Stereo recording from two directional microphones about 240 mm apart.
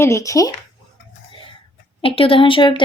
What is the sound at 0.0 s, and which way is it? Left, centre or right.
Speech, centre.